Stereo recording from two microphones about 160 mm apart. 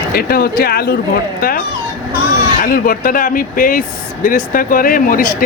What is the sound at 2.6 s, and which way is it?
Speech, 60° left (ahead or behind).